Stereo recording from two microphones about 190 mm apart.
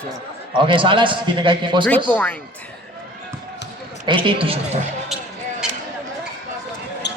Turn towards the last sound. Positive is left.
turn(degrees=65)  # may be behind; listen again after turning